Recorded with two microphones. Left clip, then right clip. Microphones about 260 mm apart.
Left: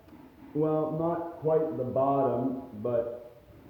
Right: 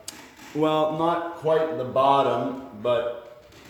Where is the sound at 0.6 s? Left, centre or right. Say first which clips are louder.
Right 5 dB; centre.